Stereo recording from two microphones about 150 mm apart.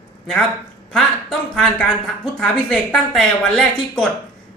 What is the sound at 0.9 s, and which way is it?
Speech, 5° left (ahead or behind).